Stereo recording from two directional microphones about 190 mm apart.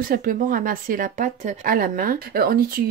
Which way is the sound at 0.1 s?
50° right (ahead or behind).